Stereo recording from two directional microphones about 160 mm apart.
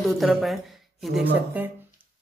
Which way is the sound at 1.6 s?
10° right (ahead or behind).